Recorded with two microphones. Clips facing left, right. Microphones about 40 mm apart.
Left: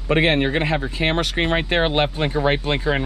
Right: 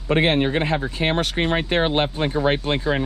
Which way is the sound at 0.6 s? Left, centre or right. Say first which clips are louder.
Left 1 dB; left.